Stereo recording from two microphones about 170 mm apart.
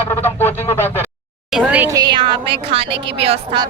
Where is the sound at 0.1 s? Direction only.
10° left (ahead or behind).